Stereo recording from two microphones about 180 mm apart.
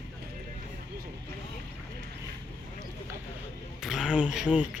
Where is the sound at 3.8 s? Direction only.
5° right (ahead or behind).